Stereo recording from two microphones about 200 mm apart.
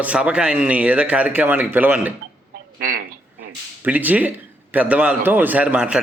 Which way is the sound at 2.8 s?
45° right (ahead or behind).